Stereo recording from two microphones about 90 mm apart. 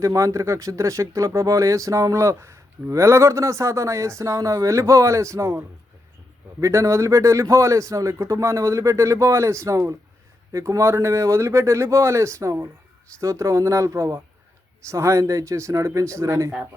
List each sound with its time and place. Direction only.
0.0 s speech: 35° right (ahead or behind)